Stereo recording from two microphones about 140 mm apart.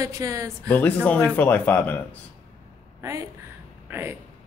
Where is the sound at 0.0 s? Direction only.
20° right (ahead or behind).